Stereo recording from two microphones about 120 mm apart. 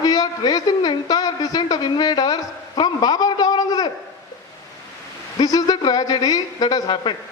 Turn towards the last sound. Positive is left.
turn(degrees=40)  # may be behind; listen again after turning